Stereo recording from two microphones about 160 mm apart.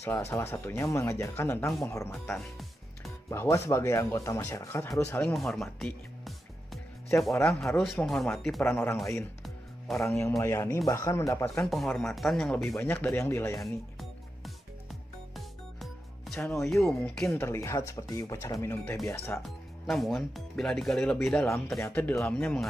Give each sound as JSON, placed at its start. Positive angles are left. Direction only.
{"t": 0.0, "sound": "speech", "side_deg": 15}
{"t": 2.2, "sound": "speech", "side_deg": 0}
{"t": 3.3, "sound": "speech", "side_deg": 15}
{"t": 5.2, "sound": "music", "side_deg": 0}
{"t": 7.6, "sound": "speech", "side_deg": 0}
{"t": 8.6, "sound": "speech", "side_deg": 15}
{"t": 11.6, "sound": "speech", "side_deg": 0}
{"t": 12.6, "sound": "speech", "side_deg": 15}
{"t": 13.6, "sound": "music", "side_deg": 0}
{"t": 16.6, "sound": "speech", "side_deg": 0}
{"t": 17.3, "sound": "speech", "side_deg": 15}
{"t": 19.4, "sound": "speech", "side_deg": 0}
{"t": 21.3, "sound": "speech", "side_deg": 15}